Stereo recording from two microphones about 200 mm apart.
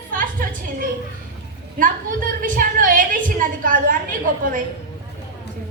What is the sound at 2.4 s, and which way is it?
A woman's voice, 45° right (ahead or behind).